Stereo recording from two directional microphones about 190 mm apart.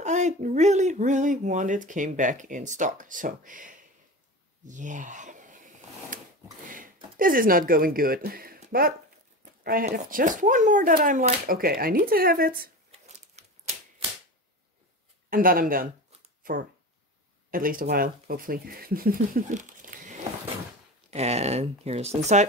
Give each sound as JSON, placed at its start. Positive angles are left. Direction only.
{"t": 0.0, "sound": "speech", "side_deg": -40}
{"t": 4.6, "sound": "a sound", "side_deg": -40}
{"t": 7.2, "sound": "speech", "side_deg": -50}
{"t": 12.9, "sound": "a sound", "side_deg": -35}
{"t": 15.2, "sound": "speech", "side_deg": -50}
{"t": 21.1, "sound": "speech", "side_deg": -35}